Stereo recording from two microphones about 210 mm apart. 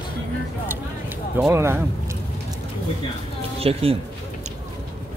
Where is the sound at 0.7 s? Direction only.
10° right (ahead or behind).